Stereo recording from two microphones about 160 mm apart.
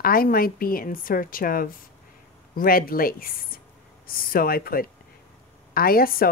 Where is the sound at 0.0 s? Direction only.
65° left (ahead or behind).